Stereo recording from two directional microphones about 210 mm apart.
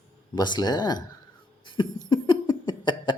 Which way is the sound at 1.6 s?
20° left (ahead or behind).